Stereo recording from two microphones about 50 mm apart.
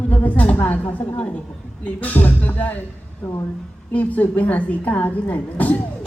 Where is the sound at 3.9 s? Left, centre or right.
Left.